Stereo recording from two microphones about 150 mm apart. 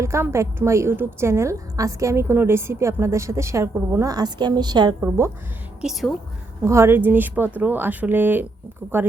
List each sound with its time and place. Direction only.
0.0 s a woman's voice: 20° right (ahead or behind)
4.9 s speech: 20° right (ahead or behind)
5.8 s a woman's voice: centre (ahead or behind)
6.6 s speech: 15° right (ahead or behind)